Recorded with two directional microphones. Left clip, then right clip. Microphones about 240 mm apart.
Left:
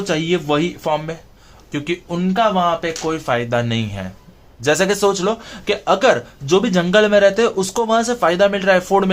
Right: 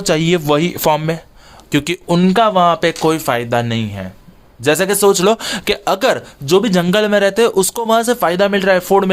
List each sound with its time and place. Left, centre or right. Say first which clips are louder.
0.0 s speech: right 4 dB; right
1.7 s speech: right 7 dB; right
3.2 s speech: right 2 dB; right